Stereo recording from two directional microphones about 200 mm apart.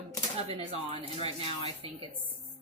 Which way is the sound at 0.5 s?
30° right (ahead or behind).